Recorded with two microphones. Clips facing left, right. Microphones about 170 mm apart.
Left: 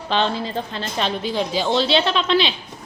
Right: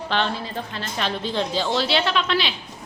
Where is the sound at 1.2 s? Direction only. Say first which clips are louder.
Left 2 dB; 10° left (ahead or behind).